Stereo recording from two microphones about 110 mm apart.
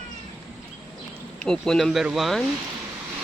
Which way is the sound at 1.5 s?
5° left (ahead or behind).